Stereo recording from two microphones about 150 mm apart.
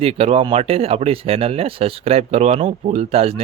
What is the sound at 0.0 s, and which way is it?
Speech, 40° right (ahead or behind).